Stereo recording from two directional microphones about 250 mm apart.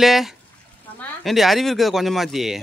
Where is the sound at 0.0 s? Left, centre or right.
Centre.